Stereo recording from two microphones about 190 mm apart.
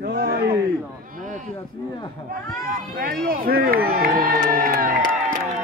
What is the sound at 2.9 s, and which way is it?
Speech, 50° right (ahead or behind).